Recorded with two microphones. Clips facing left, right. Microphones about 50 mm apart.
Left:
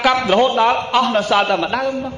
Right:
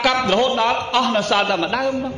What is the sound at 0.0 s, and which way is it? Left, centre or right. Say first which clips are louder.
A man's voice: left 3 dB; centre.